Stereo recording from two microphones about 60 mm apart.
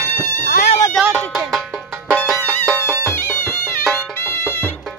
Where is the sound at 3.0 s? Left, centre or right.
Left.